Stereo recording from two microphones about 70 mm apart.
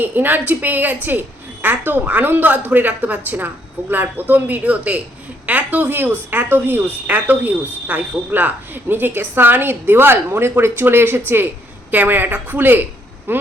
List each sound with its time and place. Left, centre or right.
0.0 s a woman's voice: right